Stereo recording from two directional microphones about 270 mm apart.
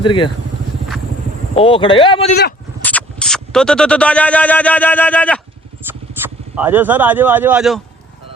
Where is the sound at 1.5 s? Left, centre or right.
Centre.